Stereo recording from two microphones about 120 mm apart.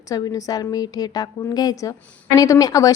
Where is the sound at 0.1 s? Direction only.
30° left (ahead or behind).